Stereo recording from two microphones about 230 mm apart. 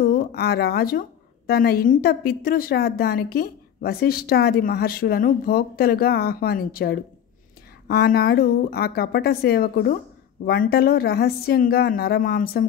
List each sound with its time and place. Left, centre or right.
0.0 s a woman's voice: left